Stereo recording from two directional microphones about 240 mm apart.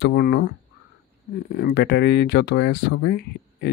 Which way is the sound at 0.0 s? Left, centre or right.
Left.